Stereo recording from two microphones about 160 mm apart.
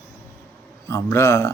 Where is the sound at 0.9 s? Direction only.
15° left (ahead or behind).